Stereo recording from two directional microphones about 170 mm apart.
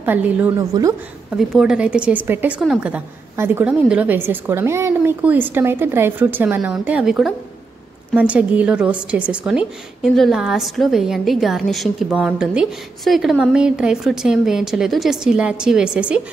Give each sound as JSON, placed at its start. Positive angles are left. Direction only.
{"t": 0.0, "sound": "a woman's voice", "side_deg": -10}
{"t": 0.6, "sound": "a woman's voice", "side_deg": -20}
{"t": 1.3, "sound": "a woman's voice", "side_deg": -5}